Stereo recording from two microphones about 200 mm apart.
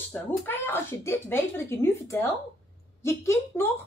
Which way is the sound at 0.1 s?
10° left (ahead or behind).